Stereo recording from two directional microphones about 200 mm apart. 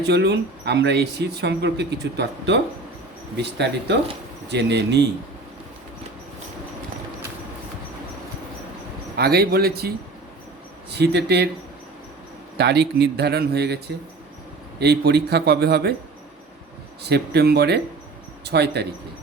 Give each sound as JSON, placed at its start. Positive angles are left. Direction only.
{"t": 0.0, "sound": "speech", "side_deg": -55}
{"t": 9.1, "sound": "speech", "side_deg": -55}
{"t": 10.9, "sound": "speech", "side_deg": -55}
{"t": 12.5, "sound": "speech", "side_deg": -55}
{"t": 17.0, "sound": "speech", "side_deg": -55}